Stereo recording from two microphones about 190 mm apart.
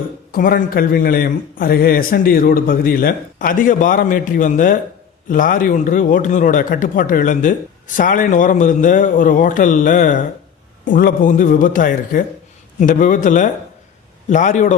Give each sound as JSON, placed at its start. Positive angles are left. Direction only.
{"t": 0.3, "sound": "a man's voice", "side_deg": 50}